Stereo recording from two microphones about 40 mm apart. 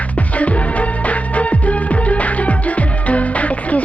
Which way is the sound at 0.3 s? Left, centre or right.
Left.